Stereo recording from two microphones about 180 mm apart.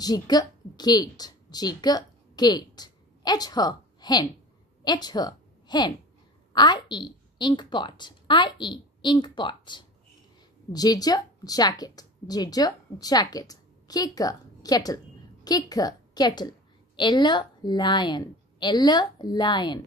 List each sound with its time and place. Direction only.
0.0 s a woman's voice: 20° left (ahead or behind)